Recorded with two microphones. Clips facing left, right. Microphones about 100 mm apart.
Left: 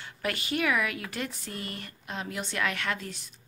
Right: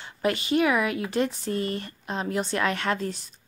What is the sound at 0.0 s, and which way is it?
Speech, 25° right (ahead or behind).